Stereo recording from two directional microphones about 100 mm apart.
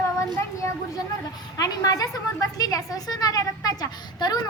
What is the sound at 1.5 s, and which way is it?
A woman's voice, 35° left (ahead or behind).